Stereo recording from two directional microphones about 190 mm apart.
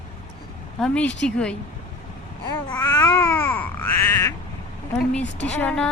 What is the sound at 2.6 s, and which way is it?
Cat, 15° left (ahead or behind).